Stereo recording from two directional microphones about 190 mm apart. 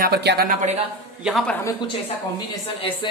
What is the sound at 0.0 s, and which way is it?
Speech, 60° right (ahead or behind).